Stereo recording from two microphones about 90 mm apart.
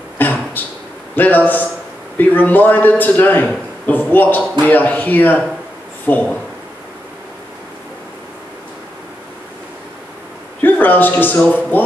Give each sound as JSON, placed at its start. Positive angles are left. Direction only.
{"t": 0.2, "sound": "a sound", "side_deg": 20}
{"t": 1.1, "sound": "a man's voice", "side_deg": 20}
{"t": 10.6, "sound": "speech", "side_deg": 20}